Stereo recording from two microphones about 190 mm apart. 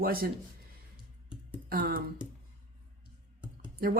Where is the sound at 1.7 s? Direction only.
50° right (ahead or behind).